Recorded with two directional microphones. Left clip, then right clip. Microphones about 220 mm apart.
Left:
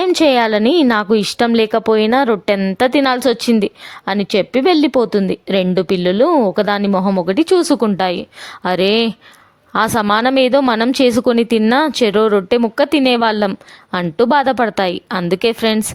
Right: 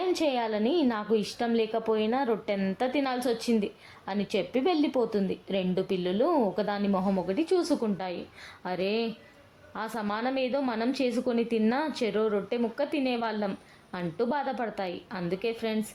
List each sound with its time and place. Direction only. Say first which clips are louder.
0.0 s a woman's voice: left 15 dB; 45° left (ahead or behind)